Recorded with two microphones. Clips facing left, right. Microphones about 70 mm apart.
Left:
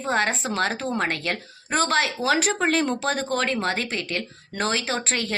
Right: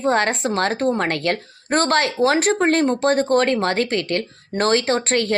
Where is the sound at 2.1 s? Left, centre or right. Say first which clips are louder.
Right 5 dB; right.